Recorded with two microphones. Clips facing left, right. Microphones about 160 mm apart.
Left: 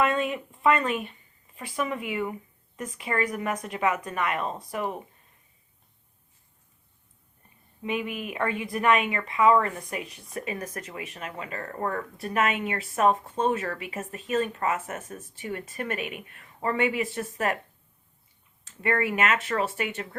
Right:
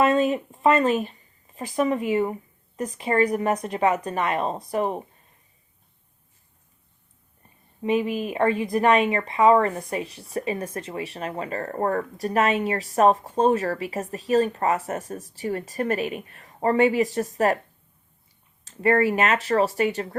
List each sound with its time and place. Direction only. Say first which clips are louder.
0.0 s speech: right 6 dB; 35° right (ahead or behind)
7.8 s speech: right 7 dB; 35° right (ahead or behind)
18.6 s speech: right 7 dB; 35° right (ahead or behind)